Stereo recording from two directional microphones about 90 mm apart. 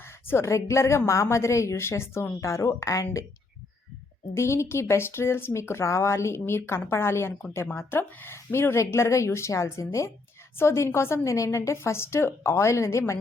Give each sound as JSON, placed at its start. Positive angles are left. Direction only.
{"t": 0.3, "sound": "a woman's voice", "side_deg": 30}
{"t": 4.4, "sound": "a woman's voice", "side_deg": 30}